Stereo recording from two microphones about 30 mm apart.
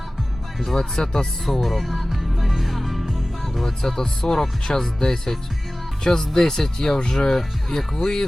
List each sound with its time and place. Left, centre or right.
0.7 s speech: centre
1.6 s music: centre
3.6 s speech: centre